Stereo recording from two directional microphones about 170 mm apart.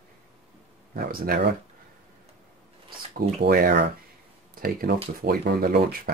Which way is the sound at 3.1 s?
55° right (ahead or behind).